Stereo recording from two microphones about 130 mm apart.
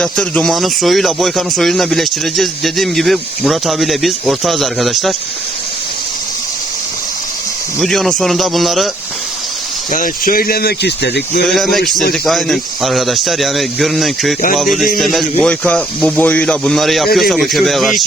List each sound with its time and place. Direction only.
0.0 s speech: 5° left (ahead or behind)
7.8 s speech: 5° left (ahead or behind)
9.9 s speech: 90° left
11.4 s speech: centre (ahead or behind)